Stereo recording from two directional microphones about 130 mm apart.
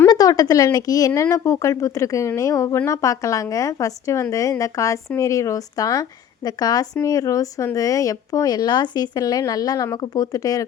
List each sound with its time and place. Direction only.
0.1 s speech: 30° left (ahead or behind)